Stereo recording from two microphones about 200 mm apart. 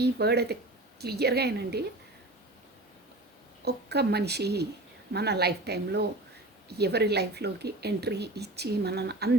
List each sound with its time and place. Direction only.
0.0 s speech: 55° right (ahead or behind)
3.6 s speech: 55° right (ahead or behind)